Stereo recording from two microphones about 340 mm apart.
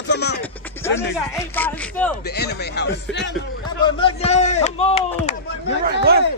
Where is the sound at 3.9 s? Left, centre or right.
Centre.